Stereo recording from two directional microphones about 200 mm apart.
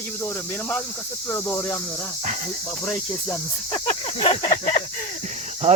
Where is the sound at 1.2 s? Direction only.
10° left (ahead or behind).